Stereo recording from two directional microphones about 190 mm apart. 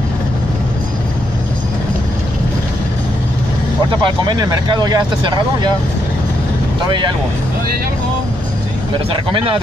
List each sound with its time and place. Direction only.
4.0 s speech: 20° right (ahead or behind)
9.1 s speech: 25° right (ahead or behind)